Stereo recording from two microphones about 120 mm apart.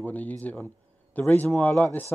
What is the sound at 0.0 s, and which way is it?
A man's voice, 15° left (ahead or behind).